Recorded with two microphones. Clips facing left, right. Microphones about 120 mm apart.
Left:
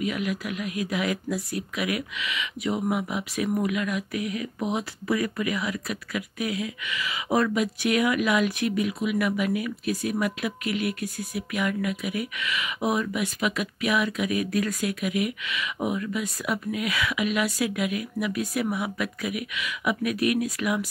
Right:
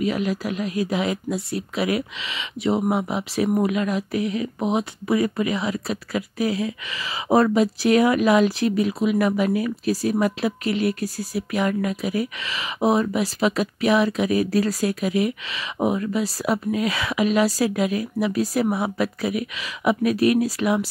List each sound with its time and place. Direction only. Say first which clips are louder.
0.0 s speech: right 5 dB; 30° right (ahead or behind)